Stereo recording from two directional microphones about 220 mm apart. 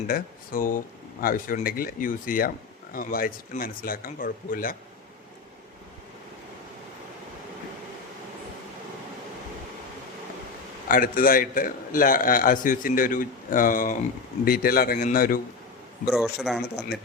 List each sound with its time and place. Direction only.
0.1 s a man's voice: 40° left (ahead or behind)
10.8 s a man's voice: 40° left (ahead or behind)
16.0 s a man's voice: centre (ahead or behind)